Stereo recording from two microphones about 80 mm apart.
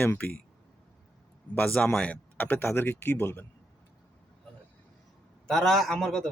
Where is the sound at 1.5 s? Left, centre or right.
Centre.